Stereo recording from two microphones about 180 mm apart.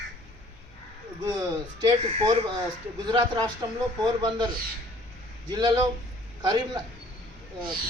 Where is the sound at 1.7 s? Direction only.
25° right (ahead or behind).